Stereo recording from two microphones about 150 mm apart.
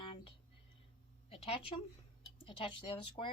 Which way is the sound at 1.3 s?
40° left (ahead or behind).